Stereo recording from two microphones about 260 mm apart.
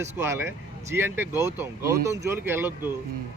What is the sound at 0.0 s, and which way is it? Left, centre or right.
Speech, centre.